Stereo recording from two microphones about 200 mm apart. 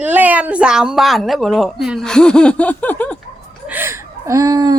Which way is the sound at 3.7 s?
10° right (ahead or behind).